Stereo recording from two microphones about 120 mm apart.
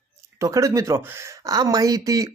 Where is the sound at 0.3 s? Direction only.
25° right (ahead or behind).